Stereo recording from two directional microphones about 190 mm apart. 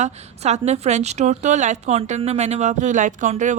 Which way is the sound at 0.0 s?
35° right (ahead or behind).